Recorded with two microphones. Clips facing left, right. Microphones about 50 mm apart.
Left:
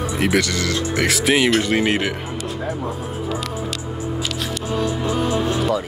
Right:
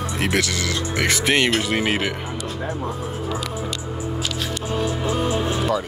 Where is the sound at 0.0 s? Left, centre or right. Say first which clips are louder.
Left 3 dB; centre.